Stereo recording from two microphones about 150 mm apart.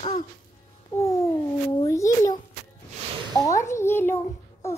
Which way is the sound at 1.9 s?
20° left (ahead or behind).